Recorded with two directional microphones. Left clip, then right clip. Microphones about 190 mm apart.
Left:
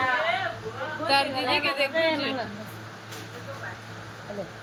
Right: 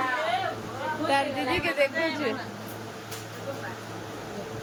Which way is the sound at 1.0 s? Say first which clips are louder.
Left 3 dB; 15° right (ahead or behind).